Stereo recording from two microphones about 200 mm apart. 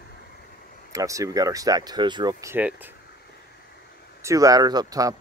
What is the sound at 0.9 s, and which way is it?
Speech, 15° right (ahead or behind).